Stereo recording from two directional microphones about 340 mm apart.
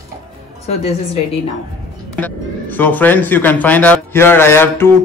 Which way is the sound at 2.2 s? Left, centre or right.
Centre.